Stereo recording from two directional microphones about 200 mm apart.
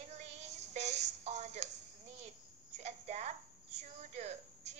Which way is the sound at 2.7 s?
35° right (ahead or behind).